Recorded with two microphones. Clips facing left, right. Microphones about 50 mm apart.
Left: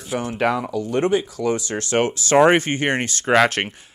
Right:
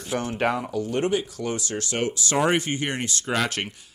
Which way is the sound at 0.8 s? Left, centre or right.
Left.